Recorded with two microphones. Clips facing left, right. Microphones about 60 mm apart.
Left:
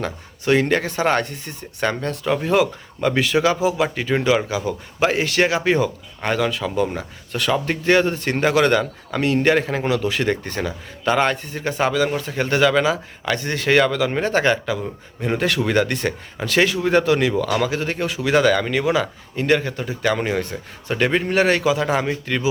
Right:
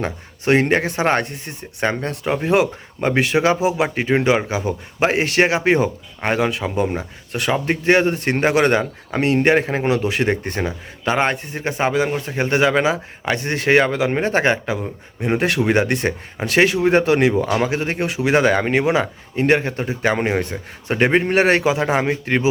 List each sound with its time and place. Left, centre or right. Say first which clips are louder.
0.0 s speech: right 2 dB; right
3.6 s a man's voice: right 1 dB; centre
14.8 s speech: right 1 dB; centre
15.4 s a man's voice: right 2 dB; right